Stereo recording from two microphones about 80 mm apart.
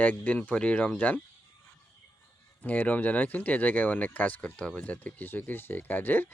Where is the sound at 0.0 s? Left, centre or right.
Centre.